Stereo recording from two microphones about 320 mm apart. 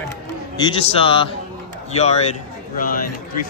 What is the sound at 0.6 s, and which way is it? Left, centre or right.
Speech, centre.